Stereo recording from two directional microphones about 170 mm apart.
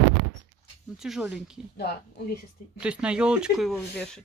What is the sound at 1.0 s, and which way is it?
Speech, 5° right (ahead or behind).